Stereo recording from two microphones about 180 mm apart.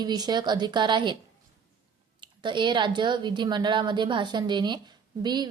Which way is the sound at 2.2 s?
25° right (ahead or behind).